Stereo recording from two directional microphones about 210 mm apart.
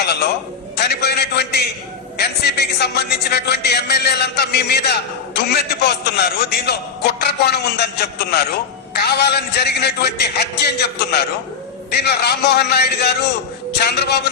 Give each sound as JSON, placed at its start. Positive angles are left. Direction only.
{"t": 0.8, "sound": "a man's voice", "side_deg": 50}